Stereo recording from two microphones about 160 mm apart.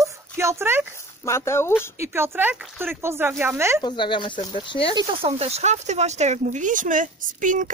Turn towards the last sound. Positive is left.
turn(degrees=-55)  # may be behind; listen again after turning